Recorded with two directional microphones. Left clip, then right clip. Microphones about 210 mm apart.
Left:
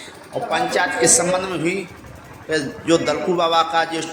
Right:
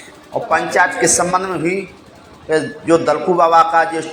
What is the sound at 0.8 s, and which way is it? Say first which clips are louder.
A man's voice: right 3 dB; centre (ahead or behind).